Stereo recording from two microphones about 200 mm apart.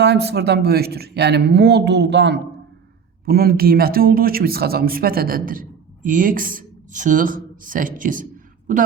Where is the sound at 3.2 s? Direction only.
50° right (ahead or behind).